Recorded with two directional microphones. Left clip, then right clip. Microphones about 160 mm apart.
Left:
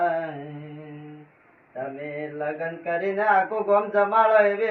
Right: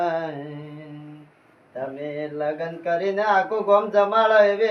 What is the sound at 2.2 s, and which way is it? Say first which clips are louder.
Speech: right 3 dB; 20° right (ahead or behind).